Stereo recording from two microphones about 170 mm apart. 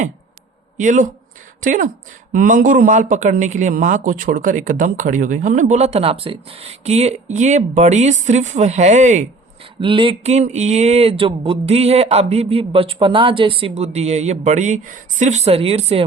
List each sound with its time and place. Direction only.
0.8 s speech: 50° right (ahead or behind)
9.8 s speech: 30° right (ahead or behind)